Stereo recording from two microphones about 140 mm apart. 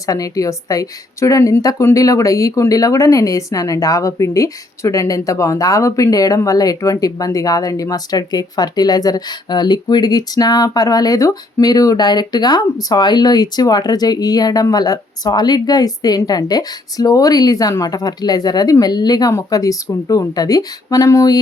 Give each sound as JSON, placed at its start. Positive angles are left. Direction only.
{"t": 0.0, "sound": "a woman's voice", "side_deg": 25}